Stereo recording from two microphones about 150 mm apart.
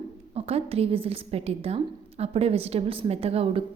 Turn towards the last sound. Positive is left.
turn(degrees=-40)  # may be behind; listen again after turning